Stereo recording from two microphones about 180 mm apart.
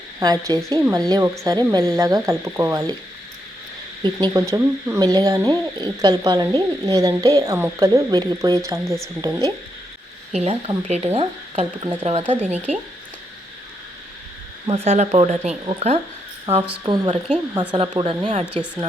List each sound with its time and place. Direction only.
0.2 s speech: 20° right (ahead or behind)
4.0 s speech: 20° right (ahead or behind)
10.3 s speech: 35° right (ahead or behind)
14.7 s speech: 35° right (ahead or behind)
16.8 s speech: 25° right (ahead or behind)
18.4 s a woman's voice: 5° right (ahead or behind)